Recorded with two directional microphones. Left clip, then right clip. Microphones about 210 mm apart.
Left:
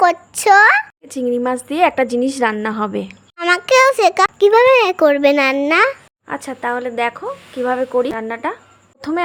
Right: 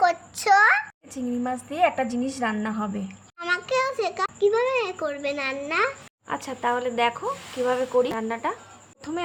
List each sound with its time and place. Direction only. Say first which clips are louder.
0.0 s a woman's voice: left 8 dB; 45° left (ahead or behind)
6.2 s speech: left 4 dB; 25° left (ahead or behind)
9.0 s speech: left 11 dB; 40° left (ahead or behind)